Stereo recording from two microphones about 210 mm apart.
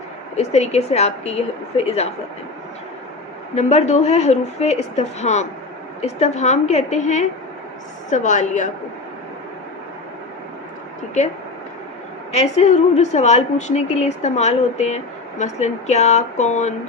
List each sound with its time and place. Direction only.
0.3 s a woman's voice: 30° left (ahead or behind)
3.5 s a woman's voice: 30° left (ahead or behind)
12.3 s a woman's voice: 30° left (ahead or behind)